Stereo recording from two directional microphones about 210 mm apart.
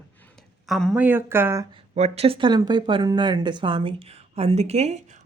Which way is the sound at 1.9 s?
30° right (ahead or behind).